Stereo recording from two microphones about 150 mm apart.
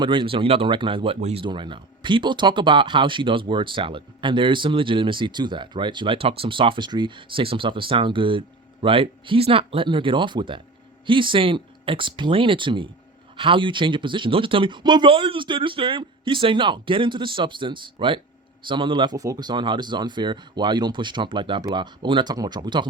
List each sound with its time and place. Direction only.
0.0 s speech: 30° right (ahead or behind)